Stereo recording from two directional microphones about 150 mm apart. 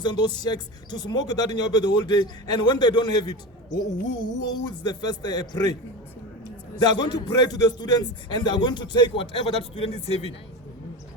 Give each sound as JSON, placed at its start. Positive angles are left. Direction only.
{"t": 0.0, "sound": "speech", "side_deg": 30}
{"t": 6.7, "sound": "a man's voice", "side_deg": 30}